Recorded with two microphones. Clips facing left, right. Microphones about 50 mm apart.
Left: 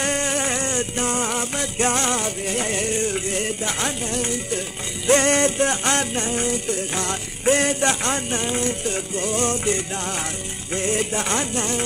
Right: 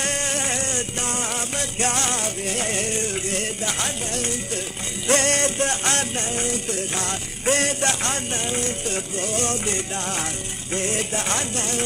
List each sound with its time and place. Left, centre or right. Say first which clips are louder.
0.0 s music: left 3 dB; left